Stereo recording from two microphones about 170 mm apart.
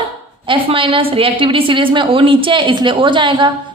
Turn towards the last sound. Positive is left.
turn(degrees=-30)  # may be behind; listen again after turning